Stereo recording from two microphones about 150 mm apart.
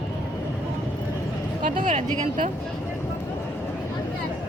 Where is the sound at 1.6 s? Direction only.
60° right (ahead or behind).